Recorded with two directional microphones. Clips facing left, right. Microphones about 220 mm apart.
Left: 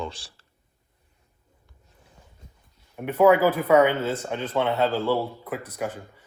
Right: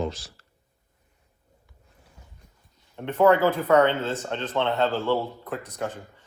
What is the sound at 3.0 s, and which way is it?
A man's voice, 10° left (ahead or behind).